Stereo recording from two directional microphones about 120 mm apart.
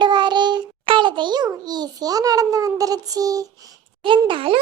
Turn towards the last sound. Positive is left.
turn(degrees=-45)  # may be behind; listen again after turning